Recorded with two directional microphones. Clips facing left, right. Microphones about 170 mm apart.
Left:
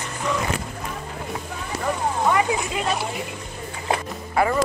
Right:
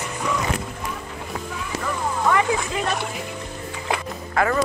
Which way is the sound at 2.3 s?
20° left (ahead or behind).